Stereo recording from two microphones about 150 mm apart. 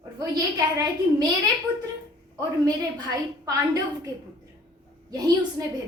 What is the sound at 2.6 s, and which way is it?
A woman's voice, 25° right (ahead or behind).